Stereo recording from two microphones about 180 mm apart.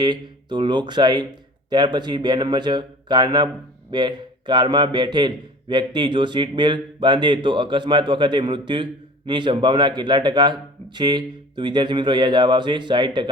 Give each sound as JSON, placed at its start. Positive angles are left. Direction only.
{"t": 0.0, "sound": "a man's voice", "side_deg": -25}